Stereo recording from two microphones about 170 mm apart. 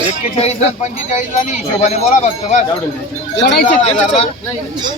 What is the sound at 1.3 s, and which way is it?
Speech, 45° left (ahead or behind).